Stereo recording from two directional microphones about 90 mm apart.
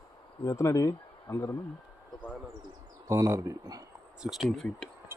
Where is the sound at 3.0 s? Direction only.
35° right (ahead or behind).